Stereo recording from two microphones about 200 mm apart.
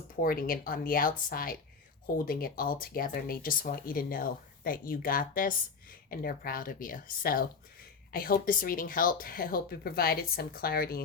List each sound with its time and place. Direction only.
0.2 s speech: 45° left (ahead or behind)